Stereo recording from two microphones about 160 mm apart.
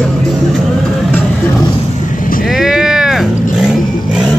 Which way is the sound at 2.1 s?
60° left (ahead or behind).